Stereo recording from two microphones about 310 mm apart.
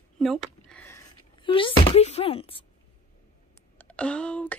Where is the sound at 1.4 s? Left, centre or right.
Centre.